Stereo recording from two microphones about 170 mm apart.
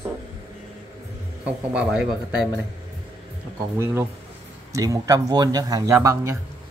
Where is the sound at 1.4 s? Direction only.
5° right (ahead or behind).